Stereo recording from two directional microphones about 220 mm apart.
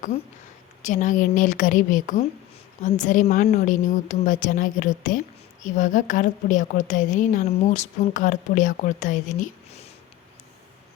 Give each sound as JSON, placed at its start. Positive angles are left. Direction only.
{"t": 0.8, "sound": "a woman's voice", "side_deg": 35}